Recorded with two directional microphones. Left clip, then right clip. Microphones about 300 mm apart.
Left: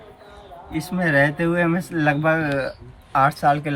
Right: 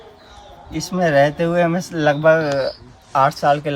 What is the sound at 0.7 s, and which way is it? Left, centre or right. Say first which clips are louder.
Speech: right 4 dB; centre.